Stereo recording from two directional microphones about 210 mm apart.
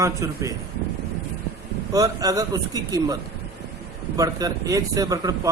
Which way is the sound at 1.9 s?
15° right (ahead or behind).